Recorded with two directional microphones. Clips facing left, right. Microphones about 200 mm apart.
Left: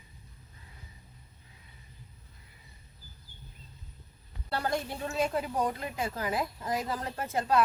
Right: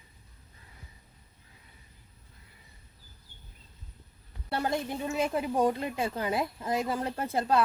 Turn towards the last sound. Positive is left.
turn(degrees=-30)  # may be behind; listen again after turning